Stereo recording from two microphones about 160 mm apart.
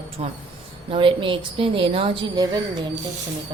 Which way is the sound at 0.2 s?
40° right (ahead or behind).